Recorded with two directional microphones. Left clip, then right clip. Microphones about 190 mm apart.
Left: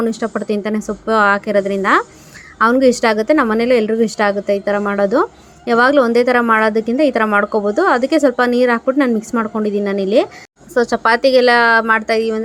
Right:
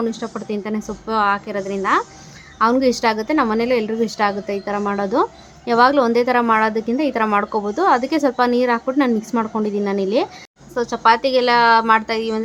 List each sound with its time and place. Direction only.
0.0 s a woman's voice: 25° left (ahead or behind)